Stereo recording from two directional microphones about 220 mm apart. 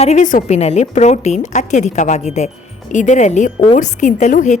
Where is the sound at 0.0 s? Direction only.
30° left (ahead or behind).